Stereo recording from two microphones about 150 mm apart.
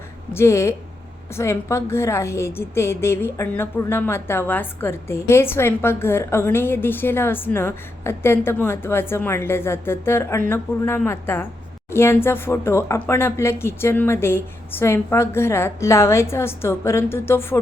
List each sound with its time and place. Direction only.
0.3 s a woman's voice: 20° left (ahead or behind)